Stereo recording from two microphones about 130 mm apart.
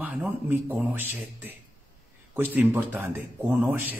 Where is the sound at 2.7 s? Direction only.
15° right (ahead or behind).